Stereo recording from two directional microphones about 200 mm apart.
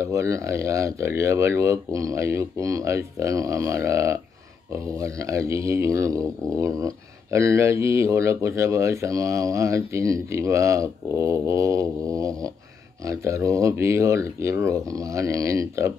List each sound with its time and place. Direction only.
0.0 s speech: 15° right (ahead or behind)